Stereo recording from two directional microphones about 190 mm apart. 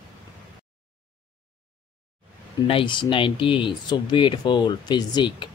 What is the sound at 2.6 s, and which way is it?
Speech, 25° left (ahead or behind).